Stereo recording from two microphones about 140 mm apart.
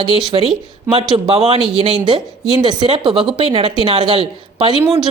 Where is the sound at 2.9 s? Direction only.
40° right (ahead or behind).